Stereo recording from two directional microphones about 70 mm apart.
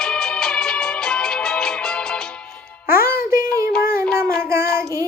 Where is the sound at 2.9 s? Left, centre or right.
Right.